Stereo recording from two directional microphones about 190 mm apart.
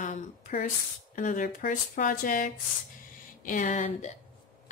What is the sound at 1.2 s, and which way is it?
Speech, 40° left (ahead or behind).